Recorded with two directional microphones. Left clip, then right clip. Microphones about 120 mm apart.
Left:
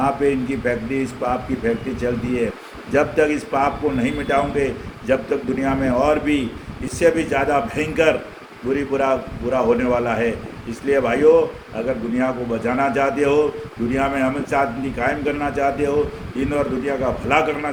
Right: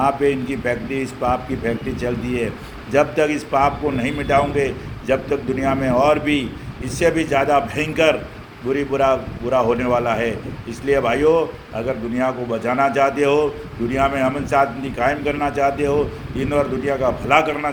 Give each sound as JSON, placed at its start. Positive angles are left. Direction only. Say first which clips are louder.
{"t": 0.0, "sound": "a man's voice", "louder": "right 1 dB", "side_deg": -30}